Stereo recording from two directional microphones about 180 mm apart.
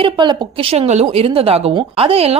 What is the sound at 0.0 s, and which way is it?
Speech, 30° right (ahead or behind).